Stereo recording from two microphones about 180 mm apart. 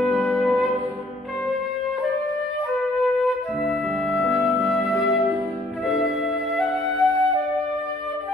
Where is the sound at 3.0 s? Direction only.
Centre (ahead or behind).